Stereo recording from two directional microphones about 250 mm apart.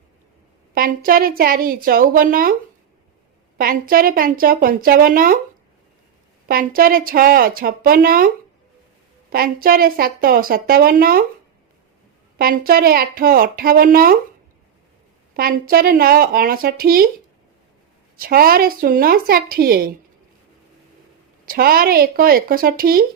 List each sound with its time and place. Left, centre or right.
0.7 s a woman's voice: right
3.6 s a woman's voice: right
6.5 s a woman's voice: right
9.3 s a woman's voice: right
12.4 s a woman's voice: right
15.4 s a woman's voice: right
18.2 s a woman's voice: right
21.4 s a woman's voice: right